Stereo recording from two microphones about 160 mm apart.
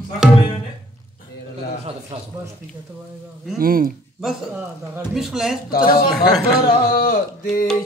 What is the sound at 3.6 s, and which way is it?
Speech, 65° right (ahead or behind).